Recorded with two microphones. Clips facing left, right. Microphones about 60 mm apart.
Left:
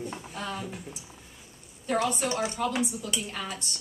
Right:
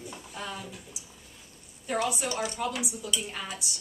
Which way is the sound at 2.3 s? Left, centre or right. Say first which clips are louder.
Left 2 dB; left.